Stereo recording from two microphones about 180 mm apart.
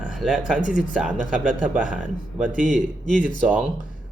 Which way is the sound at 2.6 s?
45° right (ahead or behind).